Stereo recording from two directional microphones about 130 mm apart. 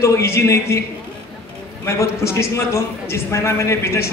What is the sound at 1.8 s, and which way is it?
A man's voice, 20° left (ahead or behind).